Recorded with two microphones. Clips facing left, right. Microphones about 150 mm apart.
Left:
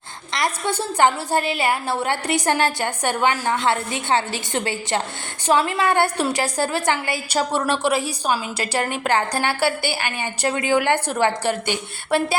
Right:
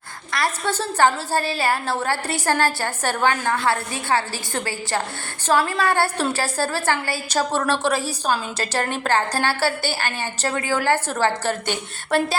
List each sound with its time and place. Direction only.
0.3 s a woman's voice: 15° left (ahead or behind)